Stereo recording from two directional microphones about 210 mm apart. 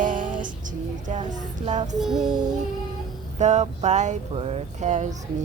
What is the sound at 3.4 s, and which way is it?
Speech, 35° right (ahead or behind).